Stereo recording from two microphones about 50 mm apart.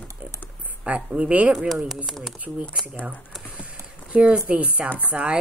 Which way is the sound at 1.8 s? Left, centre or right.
Centre.